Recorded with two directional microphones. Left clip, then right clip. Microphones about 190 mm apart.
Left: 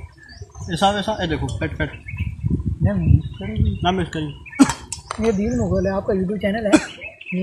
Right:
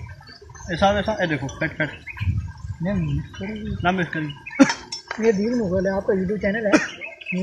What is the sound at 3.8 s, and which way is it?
Speech, 20° left (ahead or behind).